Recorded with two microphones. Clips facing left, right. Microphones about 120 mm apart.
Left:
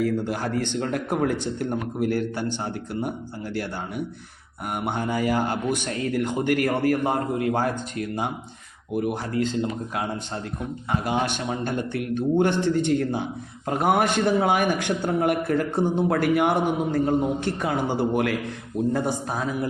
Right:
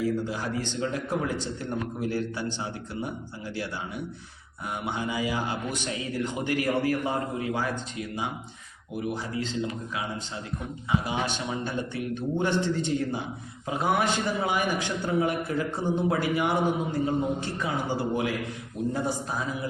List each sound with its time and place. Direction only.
0.0 s a man's voice: 60° left (ahead or behind)
9.3 s a man's voice: 50° left (ahead or behind)